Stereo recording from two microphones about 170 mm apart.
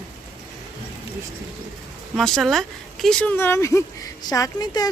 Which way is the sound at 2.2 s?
Centre (ahead or behind).